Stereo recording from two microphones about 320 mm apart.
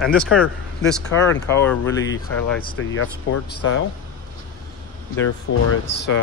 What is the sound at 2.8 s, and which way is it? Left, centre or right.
Speech, left.